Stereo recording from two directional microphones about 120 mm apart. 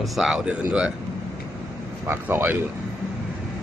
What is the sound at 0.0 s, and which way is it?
Speech, 5° right (ahead or behind).